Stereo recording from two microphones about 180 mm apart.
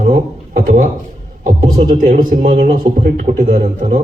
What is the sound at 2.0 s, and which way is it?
Speech, 50° right (ahead or behind).